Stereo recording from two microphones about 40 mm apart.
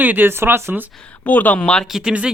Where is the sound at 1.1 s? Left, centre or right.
Left.